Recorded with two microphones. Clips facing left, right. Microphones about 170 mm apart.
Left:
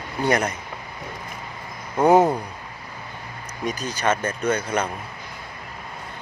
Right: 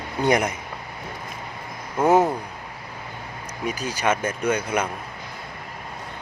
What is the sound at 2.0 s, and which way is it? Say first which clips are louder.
Speech: left 2 dB; 15° left (ahead or behind).